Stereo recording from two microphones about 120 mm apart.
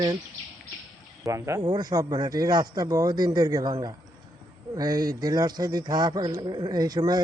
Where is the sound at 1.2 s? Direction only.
25° right (ahead or behind).